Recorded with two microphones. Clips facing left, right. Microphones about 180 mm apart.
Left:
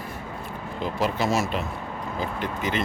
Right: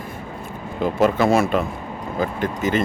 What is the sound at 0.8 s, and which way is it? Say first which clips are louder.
Speech: right 8 dB; 50° right (ahead or behind).